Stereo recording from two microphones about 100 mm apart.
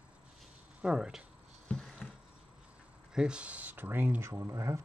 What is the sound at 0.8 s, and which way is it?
Speech, 10° right (ahead or behind).